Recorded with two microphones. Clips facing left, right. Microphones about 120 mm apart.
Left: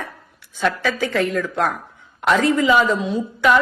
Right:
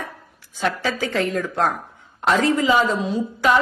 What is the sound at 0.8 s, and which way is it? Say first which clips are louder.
A woman's voice: left 2 dB; 30° right (ahead or behind).